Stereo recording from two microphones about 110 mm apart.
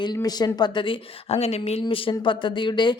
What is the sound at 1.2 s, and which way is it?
Speech, 70° left (ahead or behind).